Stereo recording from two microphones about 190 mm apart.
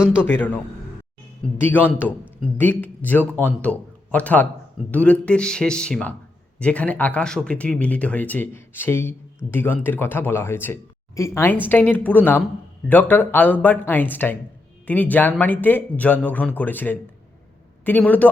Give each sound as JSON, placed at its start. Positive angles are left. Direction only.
{"t": 0.2, "sound": "speech", "side_deg": 10}